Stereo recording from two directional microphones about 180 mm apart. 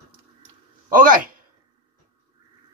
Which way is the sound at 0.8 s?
50° right (ahead or behind).